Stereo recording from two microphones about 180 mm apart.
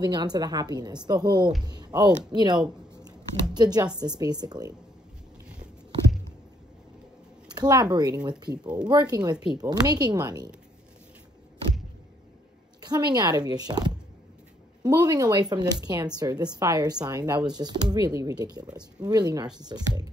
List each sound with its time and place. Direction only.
0.0 s speech: 25° right (ahead or behind)
7.5 s speech: 20° right (ahead or behind)
12.8 s speech: 20° right (ahead or behind)